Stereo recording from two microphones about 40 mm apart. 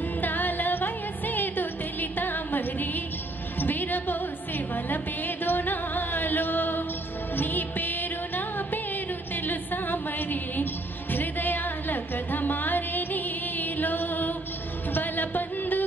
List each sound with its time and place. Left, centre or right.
0.2 s music: left